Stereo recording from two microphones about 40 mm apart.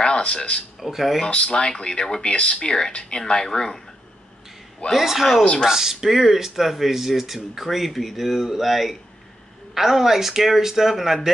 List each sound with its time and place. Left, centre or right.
0.0 s speech: left
0.7 s speech: centre
1.2 s speech: left
4.9 s speech: centre